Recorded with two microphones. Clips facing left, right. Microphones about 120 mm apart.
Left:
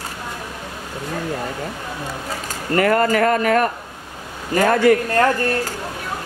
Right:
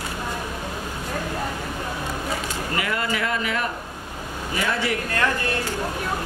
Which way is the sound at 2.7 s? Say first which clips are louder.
Left 11 dB; 50° left (ahead or behind).